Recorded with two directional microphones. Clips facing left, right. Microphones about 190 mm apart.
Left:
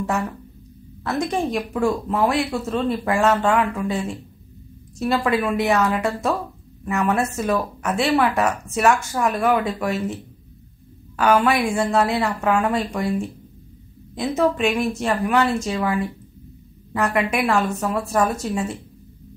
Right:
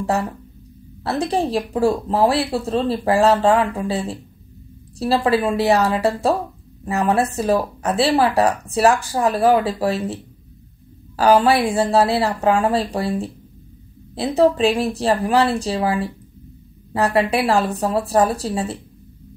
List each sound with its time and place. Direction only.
0.0 s speech: 35° right (ahead or behind)
11.1 s speech: 35° right (ahead or behind)